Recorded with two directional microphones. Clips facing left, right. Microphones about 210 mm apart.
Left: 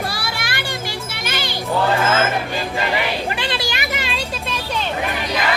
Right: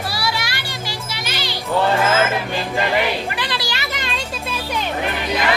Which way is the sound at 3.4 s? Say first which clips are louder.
Left 2 dB; 25° left (ahead or behind).